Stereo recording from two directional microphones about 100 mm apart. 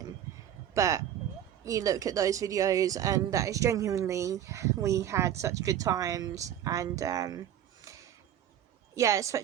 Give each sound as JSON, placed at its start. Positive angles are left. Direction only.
{"t": 0.7, "sound": "speech", "side_deg": -35}
{"t": 9.0, "sound": "speech", "side_deg": -30}